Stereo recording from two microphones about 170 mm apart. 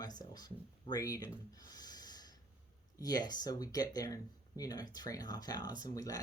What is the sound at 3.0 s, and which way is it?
Speech, 20° left (ahead or behind).